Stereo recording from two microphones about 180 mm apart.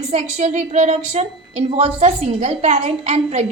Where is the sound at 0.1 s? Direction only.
40° right (ahead or behind).